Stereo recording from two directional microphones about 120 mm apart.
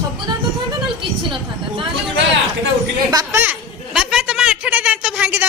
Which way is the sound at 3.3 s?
15° right (ahead or behind).